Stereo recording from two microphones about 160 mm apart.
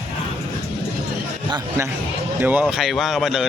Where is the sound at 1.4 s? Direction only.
25° right (ahead or behind).